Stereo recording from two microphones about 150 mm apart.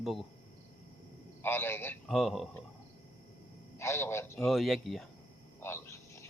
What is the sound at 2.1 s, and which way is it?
Speech, centre (ahead or behind).